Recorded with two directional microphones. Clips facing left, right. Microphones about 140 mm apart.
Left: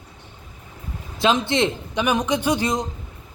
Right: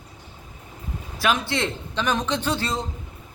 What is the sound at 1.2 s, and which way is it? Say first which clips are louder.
Speech: left 4 dB; 20° left (ahead or behind).